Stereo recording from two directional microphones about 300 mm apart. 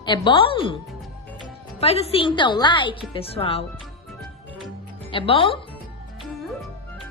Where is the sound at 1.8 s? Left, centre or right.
Centre.